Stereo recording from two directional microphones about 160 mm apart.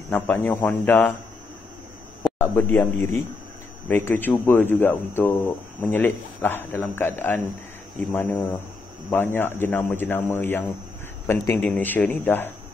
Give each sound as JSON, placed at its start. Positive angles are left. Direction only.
{"t": 0.1, "sound": "speech", "side_deg": 10}
{"t": 2.3, "sound": "speech", "side_deg": 15}